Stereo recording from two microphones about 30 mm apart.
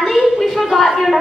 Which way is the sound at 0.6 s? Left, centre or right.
Centre.